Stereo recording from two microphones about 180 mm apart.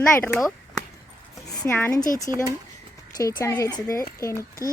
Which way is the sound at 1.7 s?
15° left (ahead or behind).